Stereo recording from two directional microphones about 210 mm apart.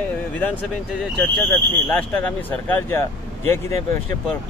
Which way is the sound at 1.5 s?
5° left (ahead or behind).